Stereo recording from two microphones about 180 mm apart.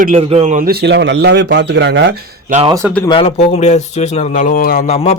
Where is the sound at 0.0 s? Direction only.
35° right (ahead or behind); by 2.1 s 75° right (ahead or behind).